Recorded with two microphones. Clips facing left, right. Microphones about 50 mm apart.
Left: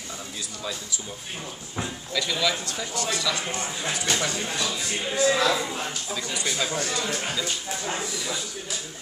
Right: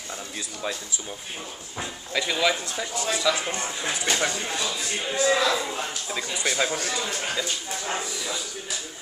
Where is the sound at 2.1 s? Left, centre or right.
Right.